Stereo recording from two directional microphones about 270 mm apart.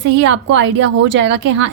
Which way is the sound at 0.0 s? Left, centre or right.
Right.